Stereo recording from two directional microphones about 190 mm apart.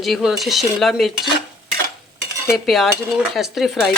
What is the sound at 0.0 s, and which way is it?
A woman's voice, centre (ahead or behind).